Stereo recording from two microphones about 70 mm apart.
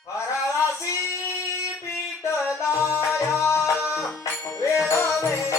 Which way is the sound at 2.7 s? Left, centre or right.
Right.